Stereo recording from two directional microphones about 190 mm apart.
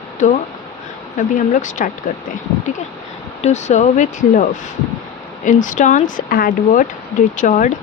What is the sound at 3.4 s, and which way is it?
Speech, 35° left (ahead or behind).